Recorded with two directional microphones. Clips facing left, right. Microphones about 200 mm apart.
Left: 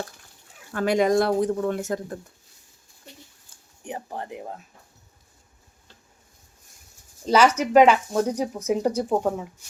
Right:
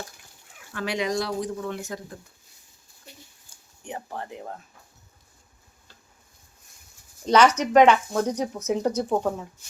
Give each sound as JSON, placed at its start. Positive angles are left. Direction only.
{"t": 0.7, "sound": "speech", "side_deg": 50}
{"t": 3.8, "sound": "speech", "side_deg": 20}
{"t": 7.3, "sound": "speech", "side_deg": 5}